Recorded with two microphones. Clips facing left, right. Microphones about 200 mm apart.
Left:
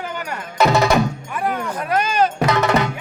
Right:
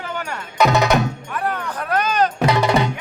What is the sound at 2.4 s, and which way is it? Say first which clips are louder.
Drum: right 2 dB; 10° right (ahead or behind).